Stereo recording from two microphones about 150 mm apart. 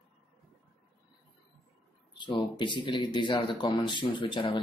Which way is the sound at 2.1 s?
30° left (ahead or behind).